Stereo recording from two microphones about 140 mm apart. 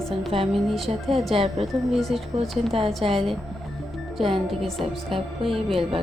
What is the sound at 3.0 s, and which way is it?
Speech, 45° right (ahead or behind).